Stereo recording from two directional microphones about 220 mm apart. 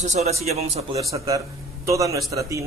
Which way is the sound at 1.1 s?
15° right (ahead or behind).